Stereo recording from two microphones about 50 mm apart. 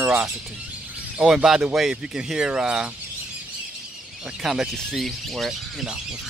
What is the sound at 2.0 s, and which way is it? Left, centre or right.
Speech, centre.